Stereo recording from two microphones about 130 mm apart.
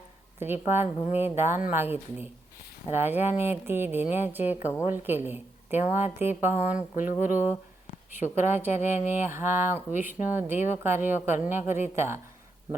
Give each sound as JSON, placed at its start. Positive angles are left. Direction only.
{"t": 0.3, "sound": "speech", "side_deg": -15}